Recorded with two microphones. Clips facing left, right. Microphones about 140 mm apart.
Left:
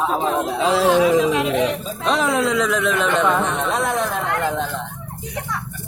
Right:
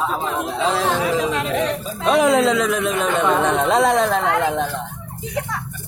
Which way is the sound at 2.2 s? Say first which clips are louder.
Right 5 dB; 20° right (ahead or behind).